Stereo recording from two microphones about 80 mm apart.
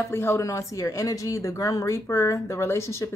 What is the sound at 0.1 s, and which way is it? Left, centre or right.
Speech, left.